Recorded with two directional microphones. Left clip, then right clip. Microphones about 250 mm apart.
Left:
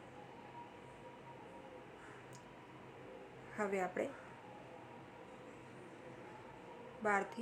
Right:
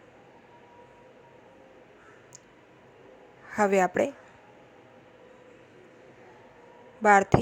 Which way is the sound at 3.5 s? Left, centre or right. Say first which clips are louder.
Right 16 dB; right.